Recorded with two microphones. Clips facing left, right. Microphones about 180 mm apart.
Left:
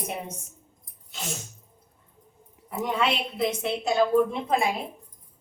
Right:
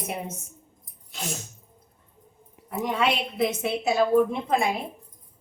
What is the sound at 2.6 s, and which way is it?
A woman's voice, centre (ahead or behind).